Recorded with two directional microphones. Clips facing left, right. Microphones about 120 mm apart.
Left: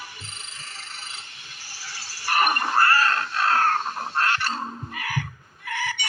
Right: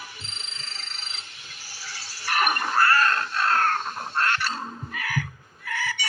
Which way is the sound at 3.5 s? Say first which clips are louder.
Left 2 dB; 35° left (ahead or behind).